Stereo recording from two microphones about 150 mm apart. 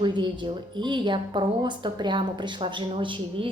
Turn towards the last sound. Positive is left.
turn(degrees=-35)  # may be behind; listen again after turning